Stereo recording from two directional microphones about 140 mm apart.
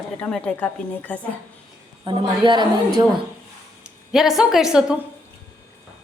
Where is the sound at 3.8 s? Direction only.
5° right (ahead or behind).